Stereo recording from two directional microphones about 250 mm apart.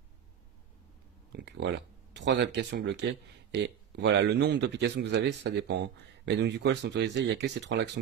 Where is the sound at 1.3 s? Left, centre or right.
Right.